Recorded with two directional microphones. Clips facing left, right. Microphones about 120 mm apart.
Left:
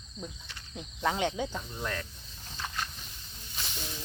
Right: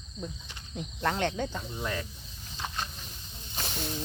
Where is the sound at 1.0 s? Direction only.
5° left (ahead or behind).